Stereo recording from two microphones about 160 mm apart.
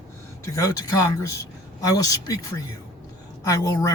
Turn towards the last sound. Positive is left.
turn(degrees=20)  # may be behind; listen again after turning